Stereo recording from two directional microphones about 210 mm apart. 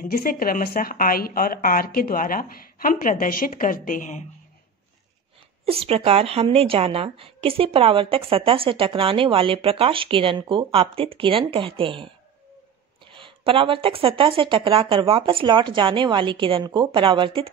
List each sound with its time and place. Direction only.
0.0 s speech: 40° left (ahead or behind)
5.7 s a woman's voice: 30° right (ahead or behind)
13.1 s a woman's voice: 25° right (ahead or behind)